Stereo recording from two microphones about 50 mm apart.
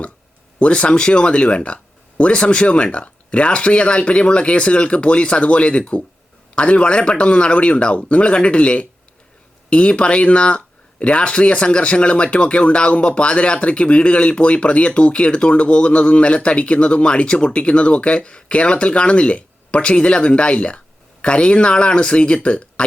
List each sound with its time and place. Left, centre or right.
0.6 s speech: left